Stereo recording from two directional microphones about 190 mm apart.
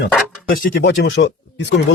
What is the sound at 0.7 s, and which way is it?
Speech, 70° left (ahead or behind).